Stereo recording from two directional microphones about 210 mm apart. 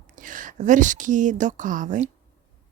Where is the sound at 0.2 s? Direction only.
40° right (ahead or behind).